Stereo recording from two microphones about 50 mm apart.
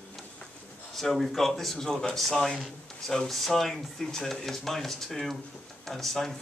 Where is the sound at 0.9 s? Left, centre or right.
Centre.